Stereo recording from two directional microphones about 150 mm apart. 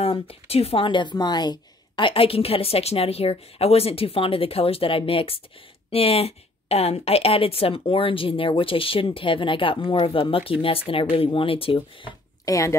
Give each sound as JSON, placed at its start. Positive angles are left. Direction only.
{"t": 0.0, "sound": "a woman's voice", "side_deg": 40}
{"t": 12.4, "sound": "speech", "side_deg": 20}